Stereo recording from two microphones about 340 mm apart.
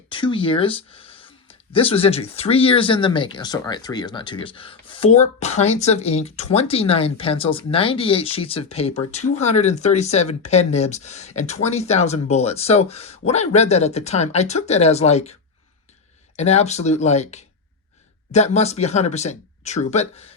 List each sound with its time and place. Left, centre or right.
0.1 s speech: centre